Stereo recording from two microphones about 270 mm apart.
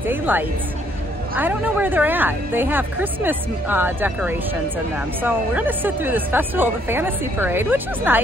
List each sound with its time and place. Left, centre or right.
0.0 s speech: centre